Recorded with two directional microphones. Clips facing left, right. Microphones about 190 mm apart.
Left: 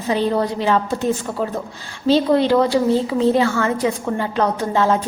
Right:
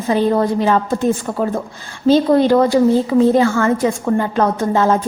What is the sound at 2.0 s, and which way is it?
A woman's voice, 45° right (ahead or behind).